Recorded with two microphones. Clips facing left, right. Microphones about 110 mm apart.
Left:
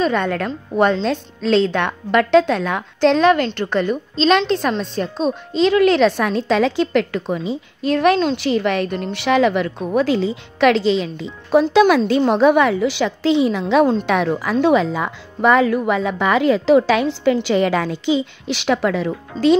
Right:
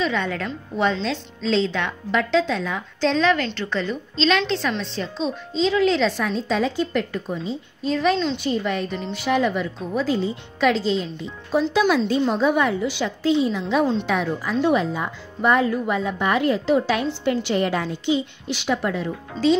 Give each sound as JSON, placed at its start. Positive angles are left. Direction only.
{"t": 0.0, "sound": "a woman's voice", "side_deg": 55}
{"t": 8.4, "sound": "a woman's voice", "side_deg": 85}
{"t": 11.7, "sound": "a woman's voice", "side_deg": 70}
{"t": 19.3, "sound": "speech", "side_deg": 40}